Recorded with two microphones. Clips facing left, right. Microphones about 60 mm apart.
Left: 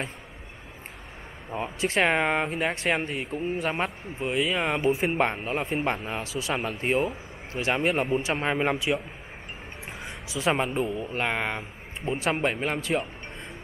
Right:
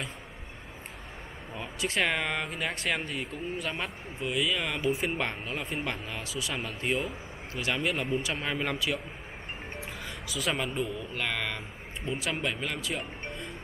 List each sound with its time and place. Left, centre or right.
1.5 s speech: left
6.5 s speech: left
6.8 s speech: left
10.0 s speech: left